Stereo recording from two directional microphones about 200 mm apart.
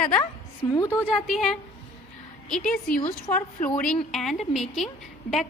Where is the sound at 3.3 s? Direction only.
20° left (ahead or behind).